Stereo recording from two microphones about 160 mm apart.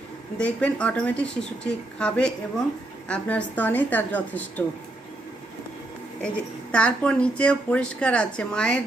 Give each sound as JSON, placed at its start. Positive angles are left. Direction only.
{"t": 0.3, "sound": "a woman's voice", "side_deg": 5}
{"t": 6.2, "sound": "a woman's voice", "side_deg": 5}